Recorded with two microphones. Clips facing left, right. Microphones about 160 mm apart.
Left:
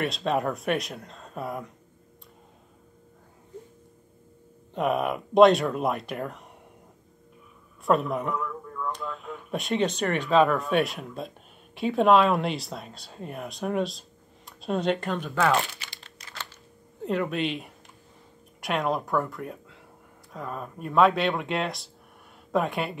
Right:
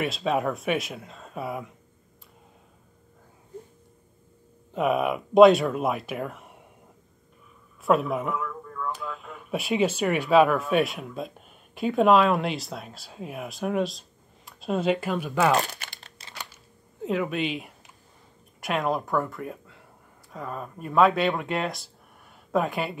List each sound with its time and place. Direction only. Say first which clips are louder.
0.0 s speech: right 1 dB; centre (ahead or behind)
4.7 s speech: right 2 dB; centre (ahead or behind)
7.8 s speech: right 1 dB; centre (ahead or behind)
15.5 s crumpling: right 1 dB; 45° right (ahead or behind)
17.0 s speech: even; centre (ahead or behind)